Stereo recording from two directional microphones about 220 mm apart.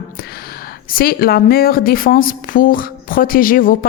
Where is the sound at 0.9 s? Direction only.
45° left (ahead or behind).